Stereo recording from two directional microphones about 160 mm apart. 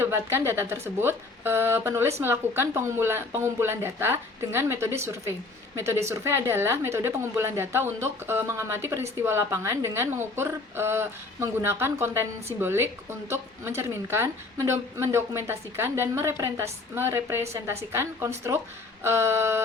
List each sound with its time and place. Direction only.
0.0 s a woman's voice: 15° right (ahead or behind)